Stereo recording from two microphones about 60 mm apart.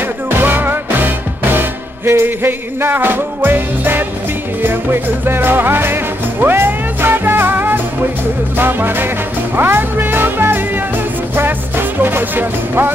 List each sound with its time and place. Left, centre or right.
0.4 s music: right